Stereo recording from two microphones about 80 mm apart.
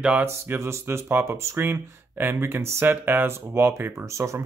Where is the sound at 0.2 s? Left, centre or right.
Right.